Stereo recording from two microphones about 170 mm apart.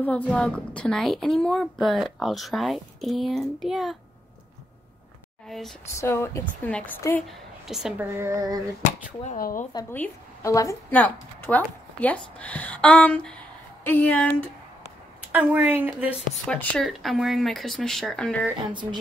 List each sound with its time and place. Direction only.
0.0 s a woman's voice: 10° left (ahead or behind)
5.5 s a woman's voice: centre (ahead or behind)
5.9 s speech: 15° left (ahead or behind)
7.2 s a woman's voice: centre (ahead or behind)
8.1 s a woman's voice: 15° right (ahead or behind)
8.8 s speech: 40° left (ahead or behind)
9.4 s speech: 55° left (ahead or behind)
9.8 s a woman's voice: 10° left (ahead or behind)
15.3 s a woman's voice: 10° right (ahead or behind)
16.4 s a woman's voice: 5° left (ahead or behind)
18.7 s speech: 25° right (ahead or behind)